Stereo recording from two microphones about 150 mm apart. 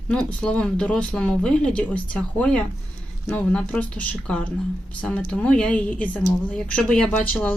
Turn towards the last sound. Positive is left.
turn(degrees=10)  # may be behind; listen again after turning